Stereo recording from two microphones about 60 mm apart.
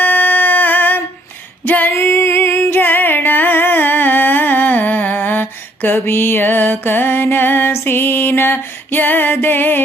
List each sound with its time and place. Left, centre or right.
0.0 s a sound: left
1.6 s female singing: left
2.0 s music: left